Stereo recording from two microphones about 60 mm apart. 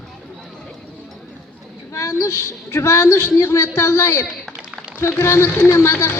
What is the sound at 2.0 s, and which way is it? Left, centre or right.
A woman's voice, left.